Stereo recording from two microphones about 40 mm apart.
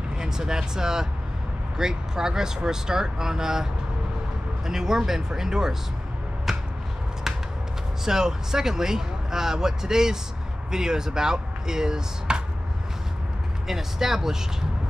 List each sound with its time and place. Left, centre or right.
0.2 s speech: centre
4.6 s speech: centre
7.3 s a sound: centre
8.0 s speech: centre
13.7 s speech: centre